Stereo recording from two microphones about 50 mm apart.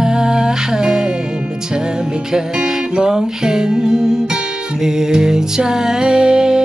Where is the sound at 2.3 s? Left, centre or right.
Centre.